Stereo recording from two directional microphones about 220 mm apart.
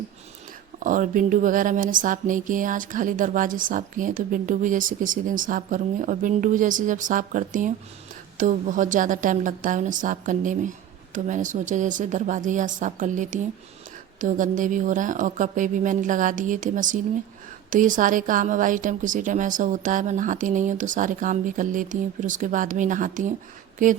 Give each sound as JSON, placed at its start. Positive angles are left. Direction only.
{"t": 0.8, "sound": "speech", "side_deg": -35}